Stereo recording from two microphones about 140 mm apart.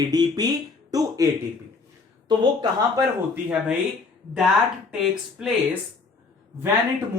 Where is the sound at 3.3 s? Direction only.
10° right (ahead or behind).